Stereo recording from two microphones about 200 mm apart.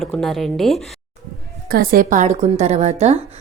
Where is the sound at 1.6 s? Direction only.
45° right (ahead or behind).